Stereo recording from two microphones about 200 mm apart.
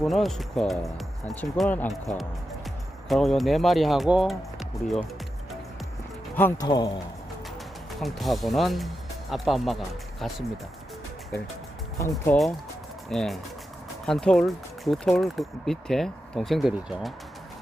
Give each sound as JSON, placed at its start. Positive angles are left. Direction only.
{"t": 0.0, "sound": "speech", "side_deg": 0}
{"t": 6.3, "sound": "speech", "side_deg": 10}
{"t": 6.7, "sound": "a man's voice", "side_deg": 20}
{"t": 8.0, "sound": "speech", "side_deg": 0}
{"t": 11.9, "sound": "speech", "side_deg": 15}
{"t": 13.1, "sound": "speech", "side_deg": 0}